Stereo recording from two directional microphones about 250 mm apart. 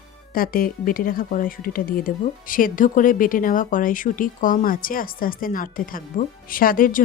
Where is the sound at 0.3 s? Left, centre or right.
Left.